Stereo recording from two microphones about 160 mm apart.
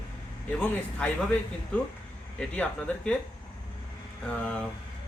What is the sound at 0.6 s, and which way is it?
Speech, 5° left (ahead or behind).